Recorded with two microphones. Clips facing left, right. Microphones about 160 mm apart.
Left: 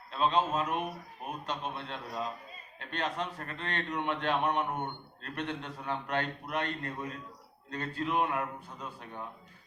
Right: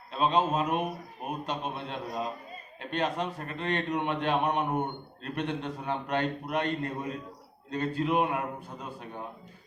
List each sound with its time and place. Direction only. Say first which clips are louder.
0.1 s a man's voice: right 3 dB; 15° right (ahead or behind)